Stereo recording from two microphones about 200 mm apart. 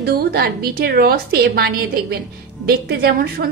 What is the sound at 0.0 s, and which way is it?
A woman's voice, 50° right (ahead or behind).